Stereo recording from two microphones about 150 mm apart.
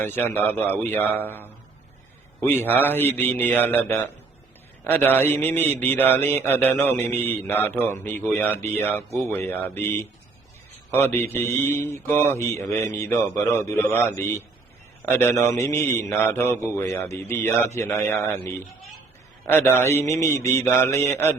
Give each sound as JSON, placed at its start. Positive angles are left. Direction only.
{"t": 0.0, "sound": "speech", "side_deg": 10}
{"t": 2.5, "sound": "a man's voice", "side_deg": 15}